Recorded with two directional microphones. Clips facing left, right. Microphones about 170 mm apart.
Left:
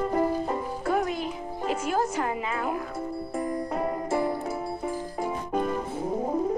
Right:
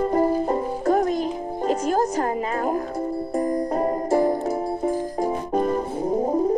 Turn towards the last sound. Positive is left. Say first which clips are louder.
# right 6 dB
turn(degrees=-35)  # may be behind; listen again after turning